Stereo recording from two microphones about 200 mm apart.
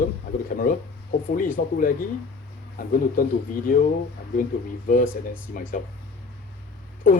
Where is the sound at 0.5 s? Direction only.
45° left (ahead or behind).